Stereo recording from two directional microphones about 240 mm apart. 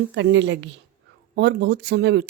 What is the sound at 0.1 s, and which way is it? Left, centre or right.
Speech, right.